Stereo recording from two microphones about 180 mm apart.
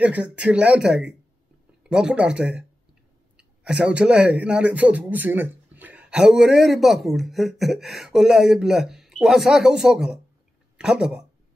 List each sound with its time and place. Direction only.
0.0 s speech: 5° right (ahead or behind)